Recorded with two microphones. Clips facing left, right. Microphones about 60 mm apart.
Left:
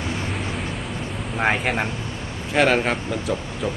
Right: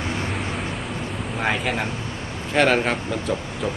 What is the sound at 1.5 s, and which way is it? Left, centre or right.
Speech, left.